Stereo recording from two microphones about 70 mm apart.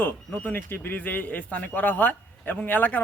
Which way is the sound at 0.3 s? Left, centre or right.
Left.